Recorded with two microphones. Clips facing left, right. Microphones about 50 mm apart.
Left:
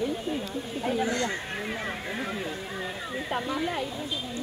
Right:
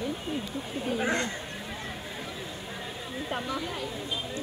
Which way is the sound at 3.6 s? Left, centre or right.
Left.